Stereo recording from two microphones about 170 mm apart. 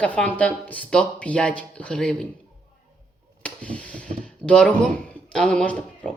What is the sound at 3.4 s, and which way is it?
Speech, 5° left (ahead or behind).